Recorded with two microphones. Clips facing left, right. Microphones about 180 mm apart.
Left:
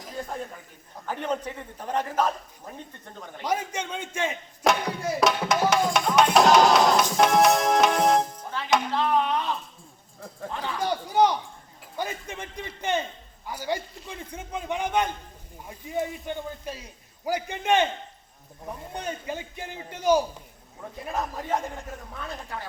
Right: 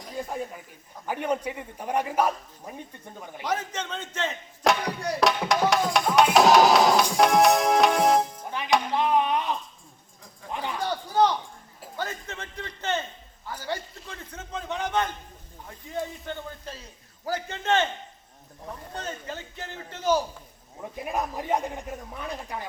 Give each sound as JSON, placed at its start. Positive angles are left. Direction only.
{"t": 0.0, "sound": "a sound", "side_deg": 0}
{"t": 1.0, "sound": "a man's voice", "side_deg": -10}
{"t": 3.4, "sound": "a man's voice", "side_deg": 10}
{"t": 4.6, "sound": "speech", "side_deg": 0}
{"t": 8.4, "sound": "music", "side_deg": -15}
{"t": 8.9, "sound": "a man's voice", "side_deg": -15}
{"t": 10.8, "sound": "a man's voice", "side_deg": 15}
{"t": 18.9, "sound": "a man's voice", "side_deg": 15}
{"t": 21.0, "sound": "a man's voice", "side_deg": -20}